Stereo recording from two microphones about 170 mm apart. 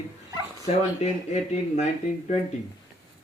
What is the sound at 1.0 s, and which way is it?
Speech, 40° left (ahead or behind).